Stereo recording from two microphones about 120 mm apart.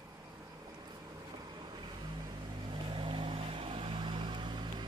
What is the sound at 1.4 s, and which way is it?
Vehicle, 35° right (ahead or behind).